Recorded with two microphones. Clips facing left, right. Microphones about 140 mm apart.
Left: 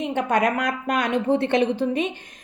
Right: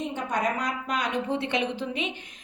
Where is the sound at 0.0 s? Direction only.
70° left (ahead or behind).